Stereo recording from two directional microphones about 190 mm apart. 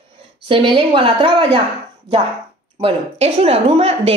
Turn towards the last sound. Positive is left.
turn(degrees=-30)  # may be behind; listen again after turning